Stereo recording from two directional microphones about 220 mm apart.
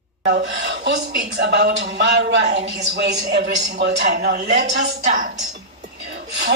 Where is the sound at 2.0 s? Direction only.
55° right (ahead or behind).